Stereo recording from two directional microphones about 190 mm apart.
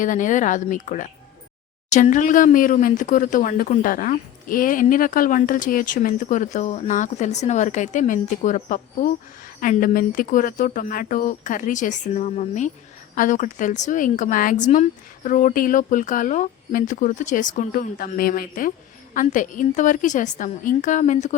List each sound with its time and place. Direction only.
0.0 s a woman's voice: 40° left (ahead or behind)